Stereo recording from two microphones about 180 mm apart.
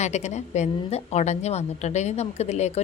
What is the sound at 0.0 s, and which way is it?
A woman's voice, 40° left (ahead or behind).